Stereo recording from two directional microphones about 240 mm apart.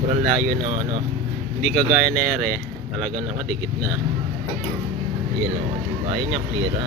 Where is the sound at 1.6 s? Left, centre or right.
Centre.